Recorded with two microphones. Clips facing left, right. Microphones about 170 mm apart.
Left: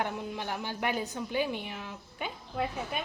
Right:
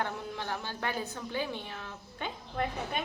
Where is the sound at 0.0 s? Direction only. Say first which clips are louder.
Left 2 dB; 15° left (ahead or behind).